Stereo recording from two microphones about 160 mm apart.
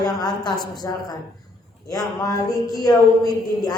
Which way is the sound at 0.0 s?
25° left (ahead or behind).